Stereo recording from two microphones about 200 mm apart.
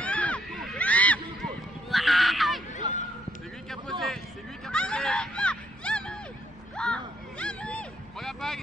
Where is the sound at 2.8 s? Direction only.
20° right (ahead or behind).